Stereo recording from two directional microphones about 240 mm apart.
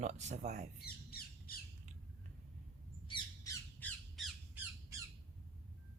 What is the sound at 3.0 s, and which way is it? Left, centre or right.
Squawk, centre.